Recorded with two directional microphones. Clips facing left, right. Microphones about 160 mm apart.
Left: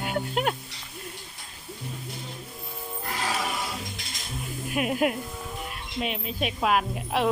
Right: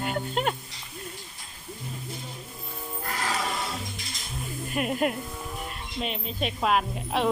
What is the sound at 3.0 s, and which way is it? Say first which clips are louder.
Music: even; 15° left (ahead or behind).